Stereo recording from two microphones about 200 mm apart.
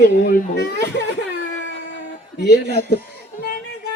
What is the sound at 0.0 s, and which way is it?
Speech, 50° left (ahead or behind).